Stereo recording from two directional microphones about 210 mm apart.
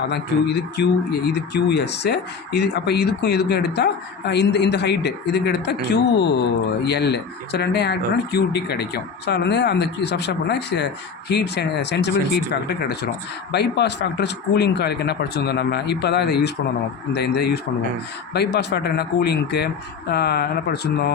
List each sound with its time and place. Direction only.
0.8 s speech: 50° left (ahead or behind)